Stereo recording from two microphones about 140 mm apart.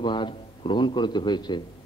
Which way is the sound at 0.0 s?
35° left (ahead or behind).